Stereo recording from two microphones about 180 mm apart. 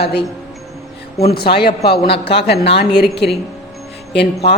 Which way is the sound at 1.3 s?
60° left (ahead or behind).